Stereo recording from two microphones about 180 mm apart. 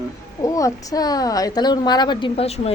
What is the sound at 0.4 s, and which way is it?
A woman's voice, 20° left (ahead or behind).